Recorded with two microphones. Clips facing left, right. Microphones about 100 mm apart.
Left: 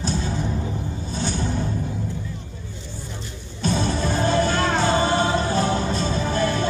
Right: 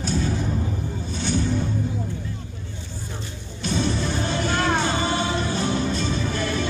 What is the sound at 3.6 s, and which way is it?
Music, 40° left (ahead or behind).